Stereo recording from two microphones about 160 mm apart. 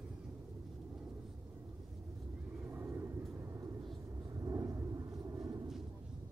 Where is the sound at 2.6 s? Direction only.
15° right (ahead or behind).